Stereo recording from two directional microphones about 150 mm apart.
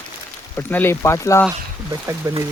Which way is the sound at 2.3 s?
25° right (ahead or behind).